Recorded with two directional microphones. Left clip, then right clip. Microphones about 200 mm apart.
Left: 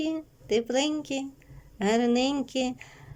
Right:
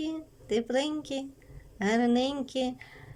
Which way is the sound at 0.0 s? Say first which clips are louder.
Left 4 dB; 5° left (ahead or behind).